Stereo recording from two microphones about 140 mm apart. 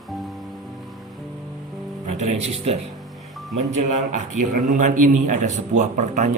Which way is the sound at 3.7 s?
60° right (ahead or behind).